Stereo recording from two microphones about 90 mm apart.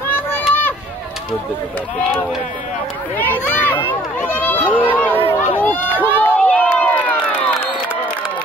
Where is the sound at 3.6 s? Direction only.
20° left (ahead or behind).